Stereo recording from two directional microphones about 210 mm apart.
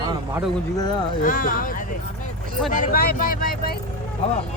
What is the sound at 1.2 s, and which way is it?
Speech, 40° left (ahead or behind).